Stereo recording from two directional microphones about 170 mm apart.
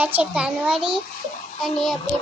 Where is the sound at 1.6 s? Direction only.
Centre (ahead or behind).